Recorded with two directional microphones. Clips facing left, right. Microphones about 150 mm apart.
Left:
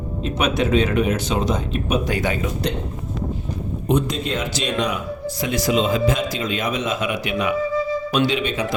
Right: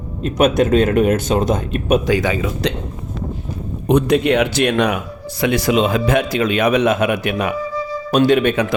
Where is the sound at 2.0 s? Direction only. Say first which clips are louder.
Right 5 dB; 90° right.